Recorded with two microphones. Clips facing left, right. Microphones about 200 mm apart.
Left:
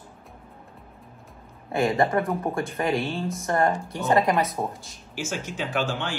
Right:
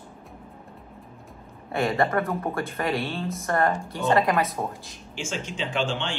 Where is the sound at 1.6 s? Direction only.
20° left (ahead or behind).